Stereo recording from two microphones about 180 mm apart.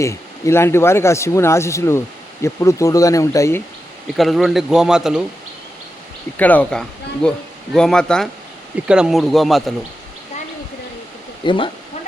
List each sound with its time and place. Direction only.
0.0 s speech: 15° left (ahead or behind)
4.2 s speech: centre (ahead or behind)
6.3 s speech: 10° left (ahead or behind)
11.4 s speech: 30° left (ahead or behind)